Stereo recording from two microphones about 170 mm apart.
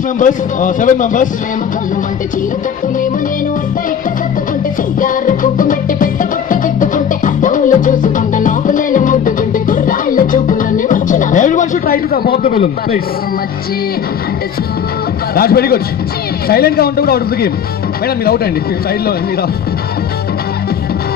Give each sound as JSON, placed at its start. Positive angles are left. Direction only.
{"t": 0.2, "sound": "a man's voice", "side_deg": 50}
{"t": 5.0, "sound": "music", "side_deg": 55}
{"t": 15.3, "sound": "a man's voice", "side_deg": 65}